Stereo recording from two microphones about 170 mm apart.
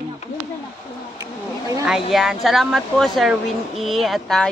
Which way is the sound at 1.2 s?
20° right (ahead or behind).